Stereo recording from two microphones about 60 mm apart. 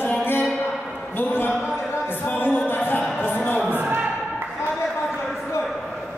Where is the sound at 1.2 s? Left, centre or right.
Left.